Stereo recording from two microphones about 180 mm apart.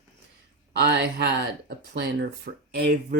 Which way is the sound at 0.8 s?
70° right (ahead or behind).